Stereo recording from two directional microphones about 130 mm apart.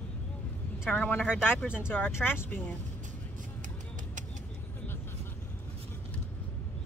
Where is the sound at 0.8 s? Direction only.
10° left (ahead or behind).